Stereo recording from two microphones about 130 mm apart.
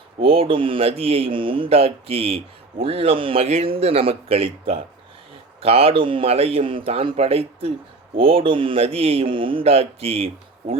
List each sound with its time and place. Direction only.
0.2 s speech: 45° right (ahead or behind)